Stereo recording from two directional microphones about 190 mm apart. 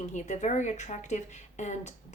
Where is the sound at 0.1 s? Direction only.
40° left (ahead or behind).